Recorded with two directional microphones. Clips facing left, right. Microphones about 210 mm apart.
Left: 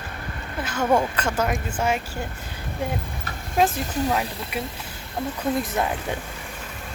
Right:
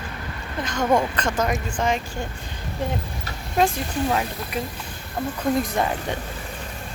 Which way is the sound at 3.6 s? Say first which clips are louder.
Even; 5° left (ahead or behind).